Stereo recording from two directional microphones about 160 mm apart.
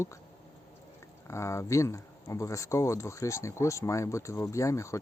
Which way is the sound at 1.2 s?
15° left (ahead or behind).